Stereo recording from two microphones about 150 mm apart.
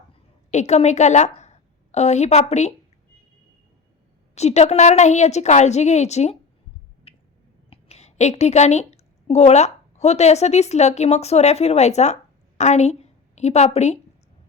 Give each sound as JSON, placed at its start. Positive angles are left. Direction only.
{"t": 0.5, "sound": "a woman's voice", "side_deg": 50}
{"t": 4.4, "sound": "a woman's voice", "side_deg": 45}
{"t": 7.1, "sound": "finger snapping", "side_deg": 40}
{"t": 7.7, "sound": "a woman's voice", "side_deg": 45}